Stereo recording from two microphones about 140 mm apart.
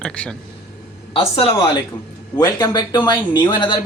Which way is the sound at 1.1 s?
40° left (ahead or behind).